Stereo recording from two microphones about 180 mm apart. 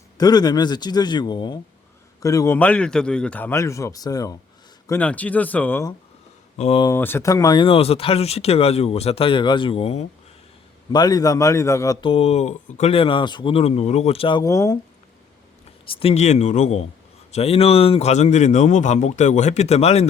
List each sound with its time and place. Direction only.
0.2 s a man's voice: 20° left (ahead or behind)
4.9 s a man's voice: 10° left (ahead or behind)
6.6 s speech: 35° left (ahead or behind)
6.8 s speech: 10° left (ahead or behind); by 10.1 s 35° left (ahead or behind)
10.9 s speech: 20° left (ahead or behind)
16.0 s speech: 35° left (ahead or behind)